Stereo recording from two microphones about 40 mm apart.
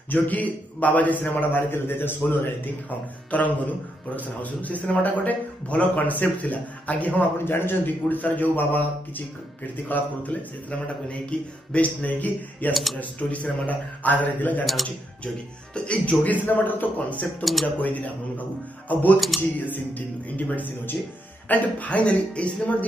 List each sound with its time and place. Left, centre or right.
0.1 s a man's voice: left
3.3 s a man's voice: left
7.3 s a man's voice: left
11.1 s a man's voice: left
12.7 s speech: centre
13.0 s a man's voice: left
15.7 s a man's voice: left
16.4 s a man's voice: left
19.1 s speech: centre
19.6 s a man's voice: left